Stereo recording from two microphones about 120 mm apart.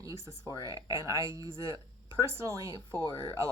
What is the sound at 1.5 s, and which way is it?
Speech, 30° left (ahead or behind).